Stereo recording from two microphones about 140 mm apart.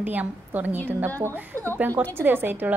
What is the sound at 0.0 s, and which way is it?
Speech, 10° right (ahead or behind).